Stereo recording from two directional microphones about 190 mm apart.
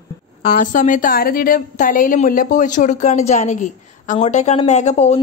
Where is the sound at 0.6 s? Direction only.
40° left (ahead or behind).